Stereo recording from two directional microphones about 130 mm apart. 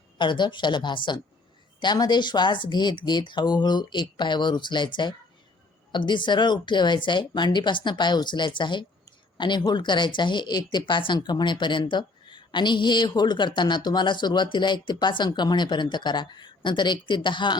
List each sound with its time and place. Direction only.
0.2 s speech: 35° left (ahead or behind)